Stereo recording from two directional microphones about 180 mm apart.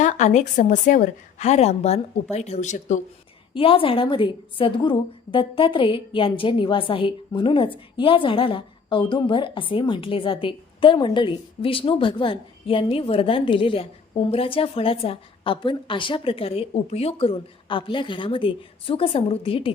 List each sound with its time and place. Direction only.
0.0 s a woman's voice: 40° left (ahead or behind)
3.5 s a woman's voice: 30° left (ahead or behind)